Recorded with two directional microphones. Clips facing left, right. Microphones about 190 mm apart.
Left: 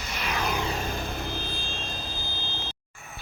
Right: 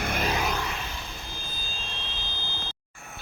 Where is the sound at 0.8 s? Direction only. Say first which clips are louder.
Left 7 dB; 50° left (ahead or behind).